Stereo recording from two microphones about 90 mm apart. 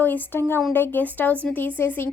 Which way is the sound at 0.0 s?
20° left (ahead or behind).